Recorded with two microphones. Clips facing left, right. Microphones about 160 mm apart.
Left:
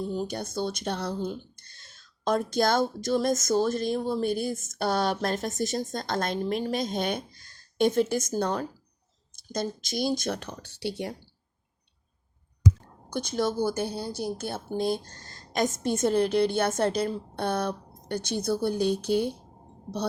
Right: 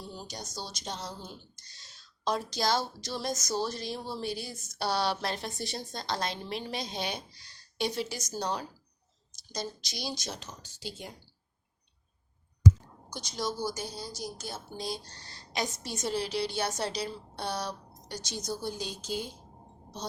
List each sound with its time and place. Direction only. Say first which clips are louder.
0.0 s speech: left 12 dB; 50° left (ahead or behind); by 11.1 s 70° left (ahead or behind)
13.1 s speech: left 8 dB; 55° left (ahead or behind)